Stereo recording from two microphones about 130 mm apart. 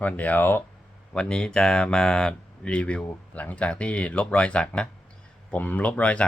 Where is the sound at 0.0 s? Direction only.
10° left (ahead or behind).